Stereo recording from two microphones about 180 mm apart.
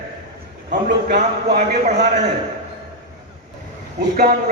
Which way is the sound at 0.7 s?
60° right (ahead or behind).